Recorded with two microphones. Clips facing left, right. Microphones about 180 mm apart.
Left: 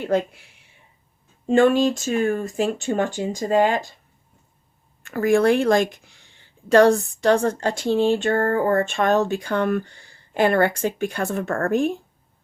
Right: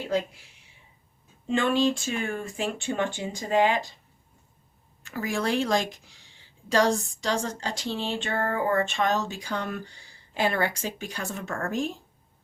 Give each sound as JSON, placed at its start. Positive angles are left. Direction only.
{"t": 0.0, "sound": "speech", "side_deg": 55}
{"t": 1.5, "sound": "speech", "side_deg": 45}
{"t": 5.0, "sound": "speech", "side_deg": 55}